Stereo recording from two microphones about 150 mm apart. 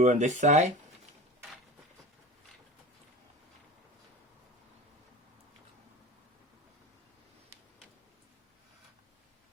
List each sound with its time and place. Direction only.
0.0 s speech: 55° right (ahead or behind)